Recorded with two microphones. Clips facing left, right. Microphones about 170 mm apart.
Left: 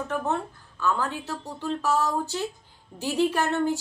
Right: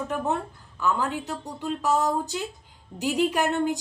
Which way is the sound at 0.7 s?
15° right (ahead or behind).